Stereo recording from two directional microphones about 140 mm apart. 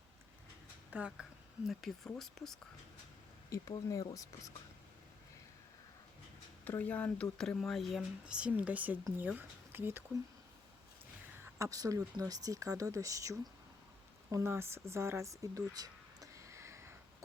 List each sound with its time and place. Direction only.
0.9 s speech: 10° right (ahead or behind)
1.6 s speech: centre (ahead or behind)
3.5 s speech: 25° left (ahead or behind)
6.7 s speech: 10° left (ahead or behind); by 10.0 s 15° right (ahead or behind)
11.6 s speech: 25° right (ahead or behind)
14.3 s a sound: 20° right (ahead or behind)